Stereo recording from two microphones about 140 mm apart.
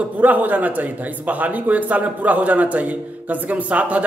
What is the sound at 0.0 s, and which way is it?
A man's voice, 10° right (ahead or behind).